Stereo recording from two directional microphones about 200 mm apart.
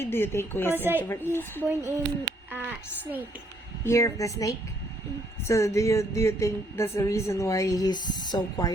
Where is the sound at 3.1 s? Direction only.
10° right (ahead or behind).